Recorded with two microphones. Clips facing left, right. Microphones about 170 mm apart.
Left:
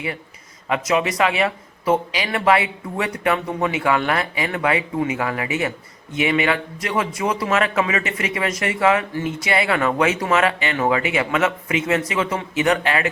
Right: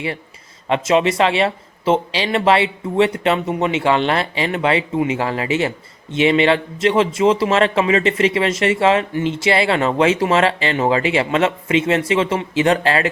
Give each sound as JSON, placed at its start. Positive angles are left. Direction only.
{"t": 0.7, "sound": "speech", "side_deg": -25}